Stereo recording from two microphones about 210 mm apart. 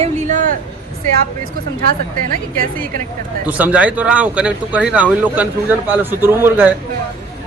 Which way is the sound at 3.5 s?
5° right (ahead or behind).